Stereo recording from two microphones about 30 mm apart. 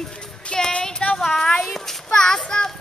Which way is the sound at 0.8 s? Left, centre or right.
Left.